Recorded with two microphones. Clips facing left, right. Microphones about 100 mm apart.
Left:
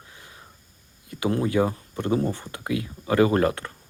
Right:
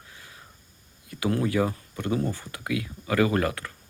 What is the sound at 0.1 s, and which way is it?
Wheeze, 25° left (ahead or behind).